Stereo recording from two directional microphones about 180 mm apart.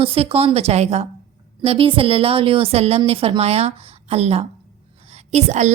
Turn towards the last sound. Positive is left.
turn(degrees=-40)  # may be behind; listen again after turning